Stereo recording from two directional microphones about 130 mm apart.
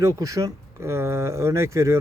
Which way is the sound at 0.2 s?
25° right (ahead or behind).